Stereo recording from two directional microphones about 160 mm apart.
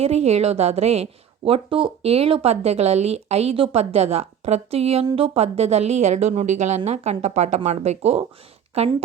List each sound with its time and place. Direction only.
0.0 s a woman's voice: 40° right (ahead or behind)